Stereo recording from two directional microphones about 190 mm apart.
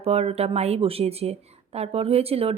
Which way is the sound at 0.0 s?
30° right (ahead or behind).